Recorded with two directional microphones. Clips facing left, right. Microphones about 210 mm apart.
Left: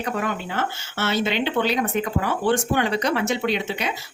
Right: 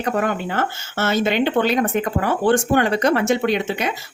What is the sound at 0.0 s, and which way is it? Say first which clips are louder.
Speech: right 5 dB; 50° right (ahead or behind).